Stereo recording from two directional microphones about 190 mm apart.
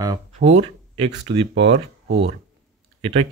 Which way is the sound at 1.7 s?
70° right (ahead or behind).